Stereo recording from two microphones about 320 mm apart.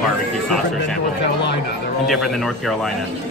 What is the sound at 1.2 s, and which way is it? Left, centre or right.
Speech, left.